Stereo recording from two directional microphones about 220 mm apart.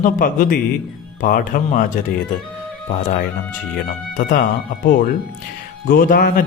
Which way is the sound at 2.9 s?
35° left (ahead or behind).